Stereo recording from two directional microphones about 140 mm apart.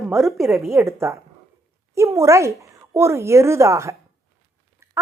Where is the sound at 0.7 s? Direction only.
20° right (ahead or behind).